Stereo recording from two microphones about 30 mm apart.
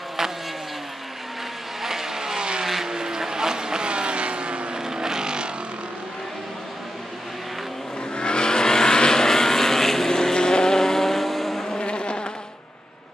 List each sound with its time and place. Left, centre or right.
1.8 s vehicle: centre; by 4.6 s right
4.7 s vehicle: right
8.2 s vehicle: left; by 11.8 s centre
11.8 s insect: left